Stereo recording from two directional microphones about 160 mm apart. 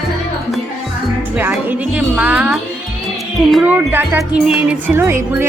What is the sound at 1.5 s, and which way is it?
Music, 10° right (ahead or behind).